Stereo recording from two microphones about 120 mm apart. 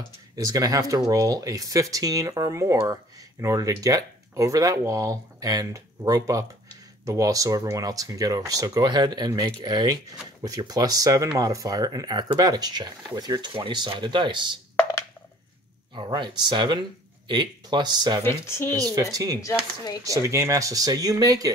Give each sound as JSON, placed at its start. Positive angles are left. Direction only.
{"t": 0.5, "sound": "speech", "side_deg": -30}
{"t": 15.9, "sound": "speech", "side_deg": -40}
{"t": 18.2, "sound": "speech", "side_deg": 20}
{"t": 18.7, "sound": "speech", "side_deg": -30}
{"t": 19.4, "sound": "speech", "side_deg": 30}
{"t": 20.1, "sound": "speech", "side_deg": -25}